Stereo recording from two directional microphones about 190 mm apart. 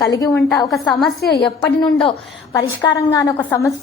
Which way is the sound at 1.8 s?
25° left (ahead or behind).